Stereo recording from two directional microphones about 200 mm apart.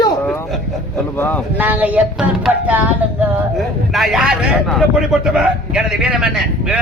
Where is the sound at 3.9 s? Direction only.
Centre (ahead or behind).